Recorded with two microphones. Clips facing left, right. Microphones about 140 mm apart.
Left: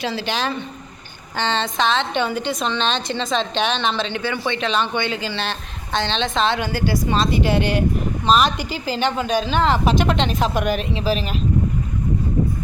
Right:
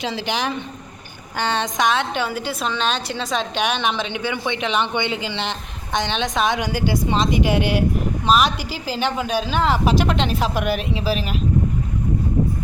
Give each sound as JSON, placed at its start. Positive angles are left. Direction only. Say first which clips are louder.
{"t": 0.0, "sound": "a woman's voice", "louder": "even", "side_deg": -20}